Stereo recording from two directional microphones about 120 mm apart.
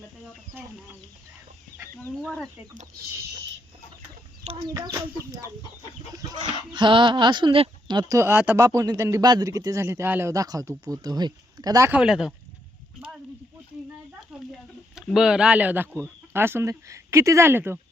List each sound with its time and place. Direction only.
2.2 s speech: 5° left (ahead or behind)
4.7 s speech: 25° right (ahead or behind)
6.7 s speech: 40° right (ahead or behind); by 10.3 s 20° right (ahead or behind)
10.3 s speech: 30° right (ahead or behind)
11.9 s speech: 5° right (ahead or behind)
15.1 s speech: 5° right (ahead or behind)